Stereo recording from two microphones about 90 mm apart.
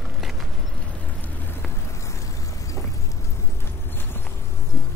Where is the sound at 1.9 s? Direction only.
35° left (ahead or behind).